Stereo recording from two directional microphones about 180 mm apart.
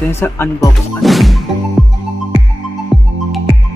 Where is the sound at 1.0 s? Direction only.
Centre (ahead or behind).